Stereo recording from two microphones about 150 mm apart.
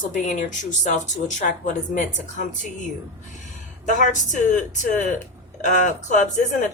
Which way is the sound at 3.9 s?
55° left (ahead or behind).